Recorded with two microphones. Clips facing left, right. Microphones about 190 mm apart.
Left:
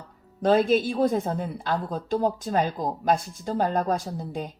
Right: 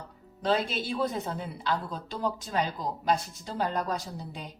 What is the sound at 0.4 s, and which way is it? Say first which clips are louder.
Speech: left 8 dB; 50° left (ahead or behind).